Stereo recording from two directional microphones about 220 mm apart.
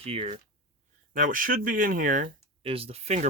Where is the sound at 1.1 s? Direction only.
40° right (ahead or behind).